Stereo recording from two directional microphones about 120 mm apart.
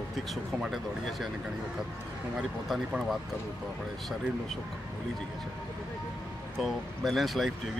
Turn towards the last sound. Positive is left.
turn(degrees=0)  # may be behind; listen again after turning